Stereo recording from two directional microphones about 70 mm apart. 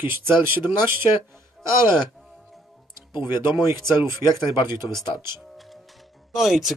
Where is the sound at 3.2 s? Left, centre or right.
Right.